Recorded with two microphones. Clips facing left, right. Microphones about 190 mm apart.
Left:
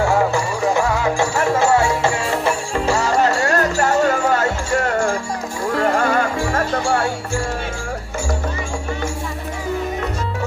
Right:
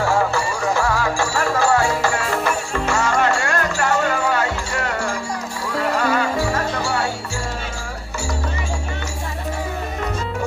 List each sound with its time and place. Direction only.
0.7 s music: 20° left (ahead or behind); by 7.0 s 50° left (ahead or behind)